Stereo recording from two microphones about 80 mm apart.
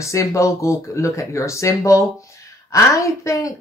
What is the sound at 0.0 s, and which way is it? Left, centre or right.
Speech, left.